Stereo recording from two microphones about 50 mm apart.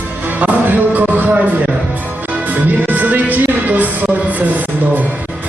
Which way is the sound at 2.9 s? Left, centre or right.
Right.